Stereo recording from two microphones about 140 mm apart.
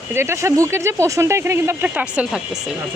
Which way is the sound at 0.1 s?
20° right (ahead or behind).